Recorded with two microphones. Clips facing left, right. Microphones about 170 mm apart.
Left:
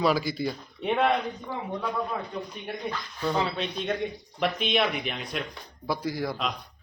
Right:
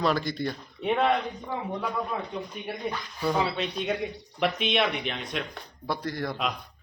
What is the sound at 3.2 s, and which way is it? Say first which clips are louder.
Speech: right 1 dB; 5° right (ahead or behind).